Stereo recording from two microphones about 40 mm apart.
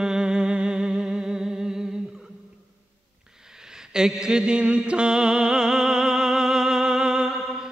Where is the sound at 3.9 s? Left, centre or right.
Centre.